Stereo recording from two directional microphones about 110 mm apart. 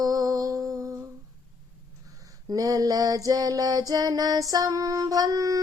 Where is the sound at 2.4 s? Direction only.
35° right (ahead or behind).